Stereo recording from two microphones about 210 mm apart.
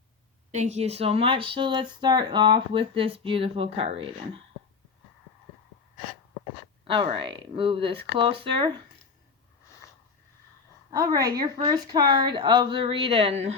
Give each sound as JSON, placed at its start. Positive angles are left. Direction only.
{"t": 0.5, "sound": "speech", "side_deg": -35}
{"t": 6.8, "sound": "speech", "side_deg": -25}
{"t": 10.9, "sound": "a woman's voice", "side_deg": -15}